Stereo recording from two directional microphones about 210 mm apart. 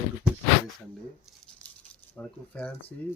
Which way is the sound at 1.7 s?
10° left (ahead or behind).